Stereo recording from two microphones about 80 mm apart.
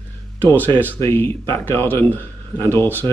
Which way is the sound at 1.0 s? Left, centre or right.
Left.